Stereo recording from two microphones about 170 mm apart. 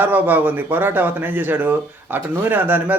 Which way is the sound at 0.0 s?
10° right (ahead or behind).